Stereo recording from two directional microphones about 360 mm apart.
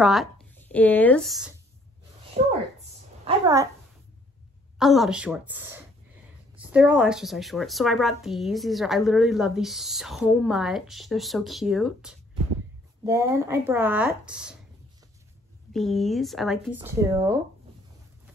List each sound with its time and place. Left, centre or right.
0.0 s speech: centre
2.4 s a sound: centre
3.3 s a child's voice: centre
4.7 s a woman's voice: centre
15.7 s a woman's voice: centre